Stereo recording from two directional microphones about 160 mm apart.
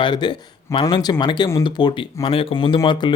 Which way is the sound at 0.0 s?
30° left (ahead or behind).